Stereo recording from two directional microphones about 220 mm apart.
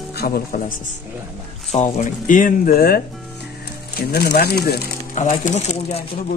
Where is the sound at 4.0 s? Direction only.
45° left (ahead or behind).